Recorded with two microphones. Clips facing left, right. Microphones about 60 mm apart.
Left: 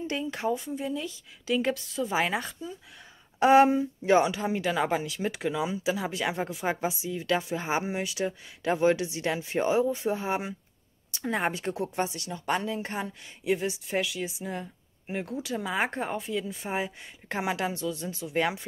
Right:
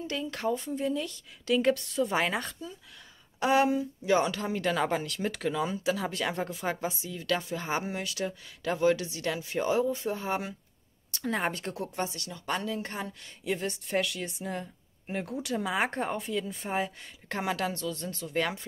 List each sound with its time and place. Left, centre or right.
0.0 s speech: left
0.6 s speech: centre
3.3 s speech: left
4.2 s speech: centre
11.7 s speech: left